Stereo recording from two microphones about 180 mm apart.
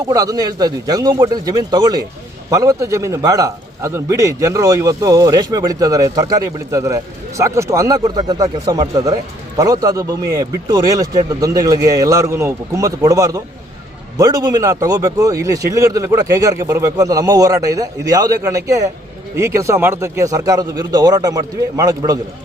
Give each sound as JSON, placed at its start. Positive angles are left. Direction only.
{"t": 0.1, "sound": "a man's voice", "side_deg": -20}